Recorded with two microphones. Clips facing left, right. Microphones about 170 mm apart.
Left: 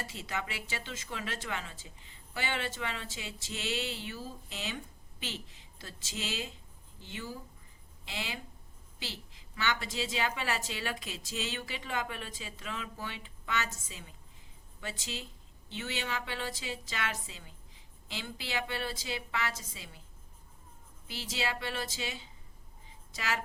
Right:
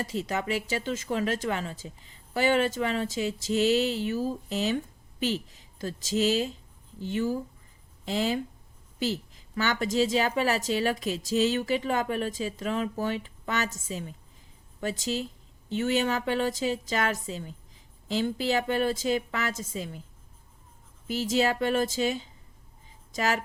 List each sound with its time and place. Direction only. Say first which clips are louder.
0.0 s a woman's voice: right 9 dB; 40° right (ahead or behind)
21.1 s a woman's voice: right 11 dB; 45° right (ahead or behind)